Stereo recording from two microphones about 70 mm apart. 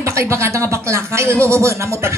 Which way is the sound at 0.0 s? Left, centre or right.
Right.